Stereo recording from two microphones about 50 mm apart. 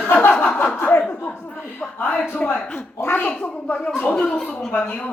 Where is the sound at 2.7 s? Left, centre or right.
Left.